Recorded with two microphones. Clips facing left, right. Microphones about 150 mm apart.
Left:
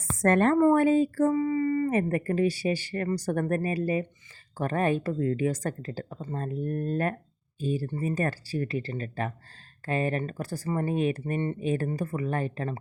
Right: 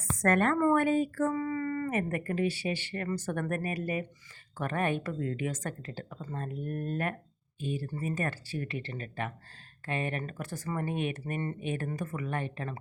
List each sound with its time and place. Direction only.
0.2 s speech: 30° left (ahead or behind)
1.9 s speech: 30° left (ahead or behind)